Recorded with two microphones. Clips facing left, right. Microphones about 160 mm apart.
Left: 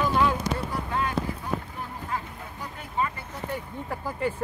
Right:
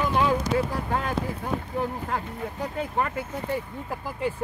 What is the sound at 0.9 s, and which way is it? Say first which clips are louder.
Speech: right 1 dB; 55° right (ahead or behind).